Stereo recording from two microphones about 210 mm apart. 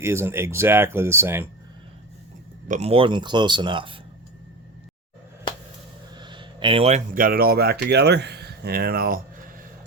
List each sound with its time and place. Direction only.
0.0 s speech: 10° right (ahead or behind)
2.6 s speech: 30° right (ahead or behind)
6.1 s speech: 20° right (ahead or behind); by 9.2 s 45° right (ahead or behind)